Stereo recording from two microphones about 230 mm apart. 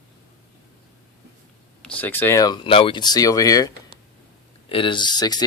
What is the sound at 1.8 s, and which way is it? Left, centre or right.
Speech, centre.